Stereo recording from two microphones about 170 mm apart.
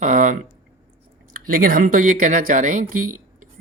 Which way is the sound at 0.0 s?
50° right (ahead or behind).